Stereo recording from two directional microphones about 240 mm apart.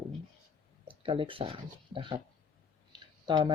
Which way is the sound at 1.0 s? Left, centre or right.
Right.